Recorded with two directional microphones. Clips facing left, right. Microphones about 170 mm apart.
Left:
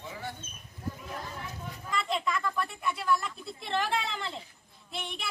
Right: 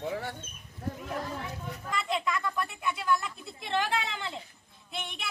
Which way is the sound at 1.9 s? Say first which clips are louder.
Even; centre (ahead or behind).